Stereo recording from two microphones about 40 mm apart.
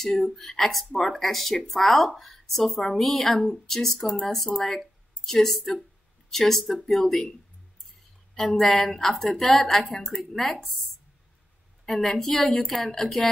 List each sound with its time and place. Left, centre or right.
0.2 s a woman's voice: centre
8.4 s a woman's voice: centre
11.8 s a woman's voice: centre